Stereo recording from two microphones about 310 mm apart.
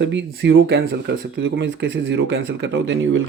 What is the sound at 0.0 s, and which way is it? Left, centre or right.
Speech, right.